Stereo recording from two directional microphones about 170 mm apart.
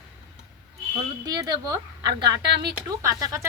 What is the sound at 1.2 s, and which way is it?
Speech, 25° right (ahead or behind).